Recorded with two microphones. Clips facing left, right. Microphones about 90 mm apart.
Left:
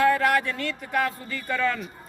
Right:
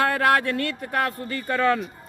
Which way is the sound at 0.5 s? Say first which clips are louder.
Right 2 dB; 55° right (ahead or behind).